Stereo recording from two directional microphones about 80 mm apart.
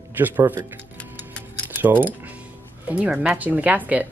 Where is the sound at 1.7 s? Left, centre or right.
Right.